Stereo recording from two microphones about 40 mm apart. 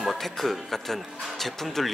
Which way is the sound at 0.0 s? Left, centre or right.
Centre.